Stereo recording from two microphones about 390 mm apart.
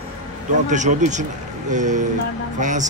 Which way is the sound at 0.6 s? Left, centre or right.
Centre.